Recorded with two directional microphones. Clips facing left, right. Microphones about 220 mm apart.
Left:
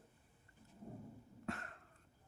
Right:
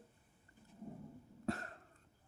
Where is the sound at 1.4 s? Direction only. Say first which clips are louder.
Right 5 dB; 35° right (ahead or behind).